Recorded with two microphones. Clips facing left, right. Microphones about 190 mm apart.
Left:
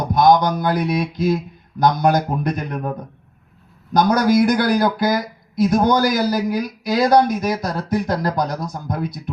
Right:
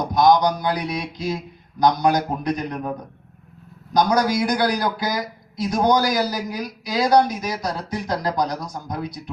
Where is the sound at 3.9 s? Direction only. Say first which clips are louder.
Left 3 dB; 50° left (ahead or behind).